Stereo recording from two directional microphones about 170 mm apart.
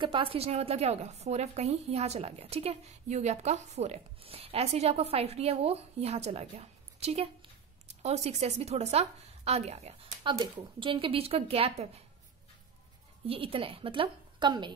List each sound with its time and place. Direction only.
0.0 s a woman's voice: 30° right (ahead or behind)
13.3 s a woman's voice: 30° right (ahead or behind)